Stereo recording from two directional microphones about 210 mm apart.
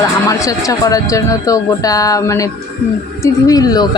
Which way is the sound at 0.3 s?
15° left (ahead or behind).